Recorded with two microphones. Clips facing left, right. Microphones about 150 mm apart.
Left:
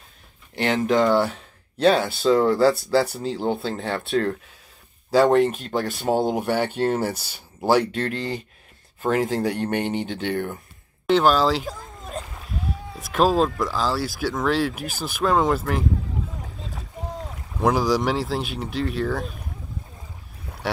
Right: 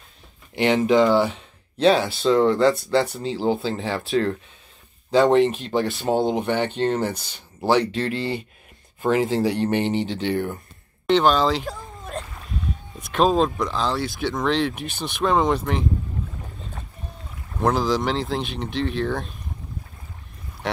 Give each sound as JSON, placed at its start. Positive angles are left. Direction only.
{"t": 0.6, "sound": "speech", "side_deg": 0}
{"t": 9.0, "sound": "speech", "side_deg": -5}
{"t": 16.3, "sound": "rowboat", "side_deg": 90}
{"t": 17.6, "sound": "speech", "side_deg": 10}